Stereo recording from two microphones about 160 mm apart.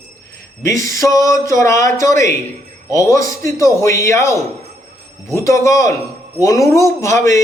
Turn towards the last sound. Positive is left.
turn(degrees=20)  # may be behind; listen again after turning